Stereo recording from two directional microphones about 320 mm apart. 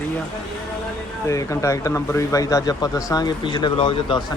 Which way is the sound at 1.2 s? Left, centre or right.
Centre.